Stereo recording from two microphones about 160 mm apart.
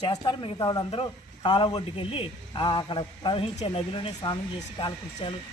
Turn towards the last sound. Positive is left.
turn(degrees=30)  # may be behind; listen again after turning